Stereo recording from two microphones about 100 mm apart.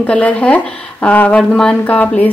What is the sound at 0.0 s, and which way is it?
A woman's voice, 15° left (ahead or behind).